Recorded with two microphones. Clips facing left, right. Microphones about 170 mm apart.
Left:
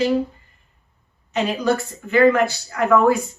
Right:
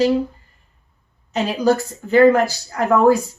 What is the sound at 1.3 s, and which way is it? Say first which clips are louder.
A woman's voice: right 3 dB; 35° right (ahead or behind).